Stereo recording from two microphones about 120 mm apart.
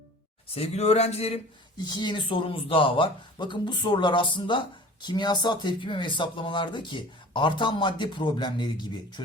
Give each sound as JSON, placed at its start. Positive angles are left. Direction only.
{"t": 0.5, "sound": "speech", "side_deg": 55}
{"t": 1.8, "sound": "speech", "side_deg": 40}